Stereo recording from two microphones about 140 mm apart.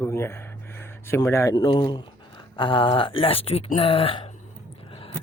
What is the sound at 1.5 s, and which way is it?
Speech, 35° left (ahead or behind).